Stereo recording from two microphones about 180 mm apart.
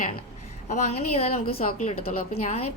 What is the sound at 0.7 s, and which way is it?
Speech, 35° left (ahead or behind).